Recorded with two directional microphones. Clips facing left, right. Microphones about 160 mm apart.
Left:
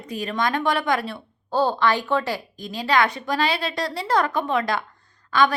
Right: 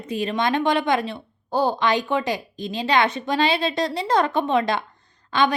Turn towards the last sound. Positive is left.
turn(degrees=-20)  # may be behind; listen again after turning